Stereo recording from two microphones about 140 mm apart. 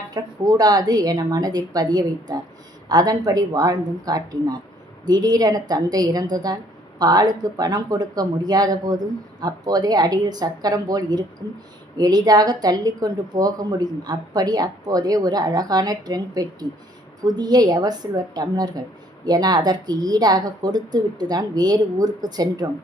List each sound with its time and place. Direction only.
0.1 s a woman's voice: 30° right (ahead or behind)